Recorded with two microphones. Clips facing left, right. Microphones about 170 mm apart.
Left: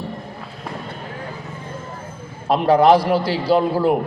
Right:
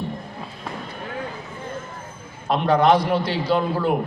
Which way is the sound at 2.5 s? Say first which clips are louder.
Left 4 dB; 30° left (ahead or behind).